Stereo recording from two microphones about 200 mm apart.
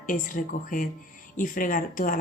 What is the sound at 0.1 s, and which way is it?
Speech, 40° left (ahead or behind).